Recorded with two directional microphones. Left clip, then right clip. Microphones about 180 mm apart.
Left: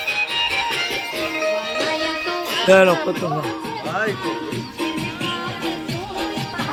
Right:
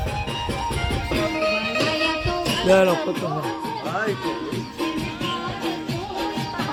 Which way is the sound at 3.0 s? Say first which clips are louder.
Left 3 dB; 20° left (ahead or behind).